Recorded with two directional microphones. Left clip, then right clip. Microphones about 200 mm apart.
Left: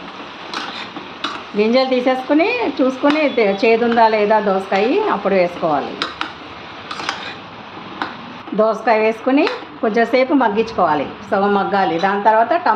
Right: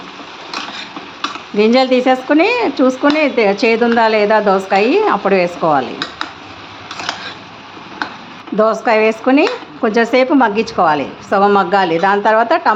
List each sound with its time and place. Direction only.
1.5 s a woman's voice: 25° right (ahead or behind)
8.5 s a woman's voice: 20° right (ahead or behind)